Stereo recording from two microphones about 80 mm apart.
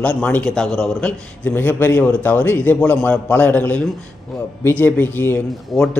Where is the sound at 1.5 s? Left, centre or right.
Left.